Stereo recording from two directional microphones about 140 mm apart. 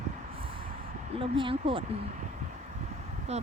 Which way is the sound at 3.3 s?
50° right (ahead or behind).